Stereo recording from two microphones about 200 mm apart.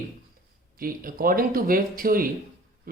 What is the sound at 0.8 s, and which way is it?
Speech, 45° right (ahead or behind).